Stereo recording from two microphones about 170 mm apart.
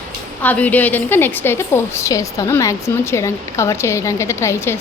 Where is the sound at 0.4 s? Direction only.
10° left (ahead or behind).